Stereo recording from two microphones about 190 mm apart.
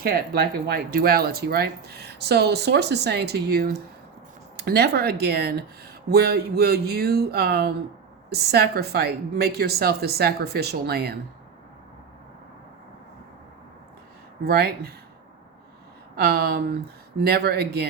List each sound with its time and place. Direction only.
0.0 s speech: 55° right (ahead or behind)
14.4 s speech: 55° right (ahead or behind)
16.1 s speech: 55° right (ahead or behind)